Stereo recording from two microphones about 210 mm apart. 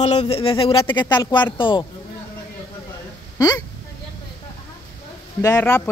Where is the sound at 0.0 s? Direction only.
30° left (ahead or behind).